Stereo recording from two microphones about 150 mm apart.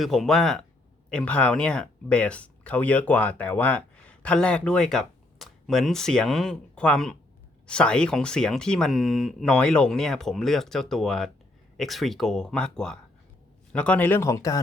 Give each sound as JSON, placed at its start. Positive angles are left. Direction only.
{"t": 0.0, "sound": "speech", "side_deg": 0}